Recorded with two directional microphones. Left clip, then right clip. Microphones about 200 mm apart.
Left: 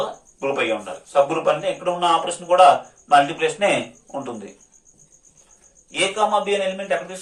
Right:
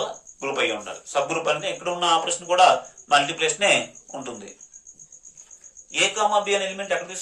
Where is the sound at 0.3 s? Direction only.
35° right (ahead or behind).